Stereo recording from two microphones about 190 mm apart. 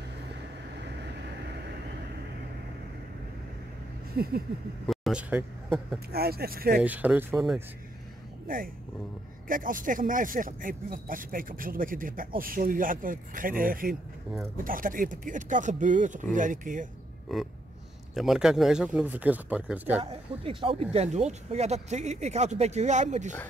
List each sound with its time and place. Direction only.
4.1 s a sound: 55° right (ahead or behind)
4.8 s a man's voice: 5° right (ahead or behind)
6.1 s speech: 55° right (ahead or behind)
6.8 s speech: 10° right (ahead or behind)
9.5 s speech: 45° right (ahead or behind)
17.3 s speech: centre (ahead or behind)
20.0 s speech: 30° right (ahead or behind)